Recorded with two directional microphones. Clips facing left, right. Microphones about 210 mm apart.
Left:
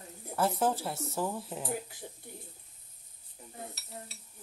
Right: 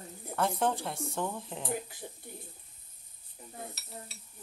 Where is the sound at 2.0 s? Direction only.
50° right (ahead or behind).